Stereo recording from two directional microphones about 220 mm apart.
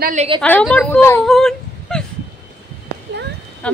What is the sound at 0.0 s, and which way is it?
Speech, 30° right (ahead or behind).